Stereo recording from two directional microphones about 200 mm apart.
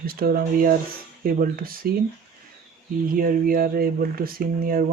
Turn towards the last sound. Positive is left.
turn(degrees=-45)  # may be behind; listen again after turning